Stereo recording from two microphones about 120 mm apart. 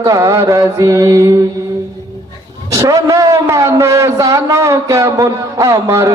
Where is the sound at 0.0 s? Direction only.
25° right (ahead or behind).